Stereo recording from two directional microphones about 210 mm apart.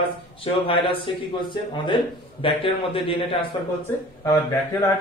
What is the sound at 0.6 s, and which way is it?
Speech, 25° left (ahead or behind).